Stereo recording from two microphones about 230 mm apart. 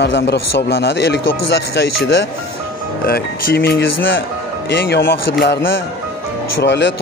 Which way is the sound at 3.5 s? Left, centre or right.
Left.